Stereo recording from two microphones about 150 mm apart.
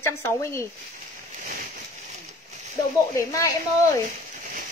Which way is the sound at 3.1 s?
20° left (ahead or behind).